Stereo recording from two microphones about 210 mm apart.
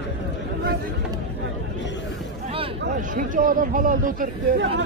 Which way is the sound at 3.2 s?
40° right (ahead or behind).